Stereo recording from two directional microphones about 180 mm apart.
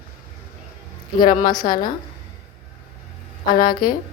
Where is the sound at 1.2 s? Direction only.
50° left (ahead or behind).